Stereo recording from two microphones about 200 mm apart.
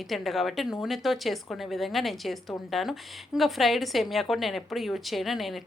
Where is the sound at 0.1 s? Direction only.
Centre (ahead or behind).